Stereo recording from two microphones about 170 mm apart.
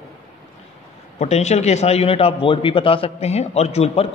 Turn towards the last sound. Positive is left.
turn(degrees=40)  # may be behind; listen again after turning